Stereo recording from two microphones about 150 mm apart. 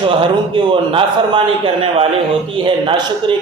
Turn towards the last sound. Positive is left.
turn(degrees=-35)  # may be behind; listen again after turning